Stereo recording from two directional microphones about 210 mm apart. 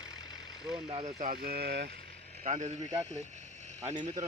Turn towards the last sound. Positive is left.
turn(degrees=-35)  # may be behind; listen again after turning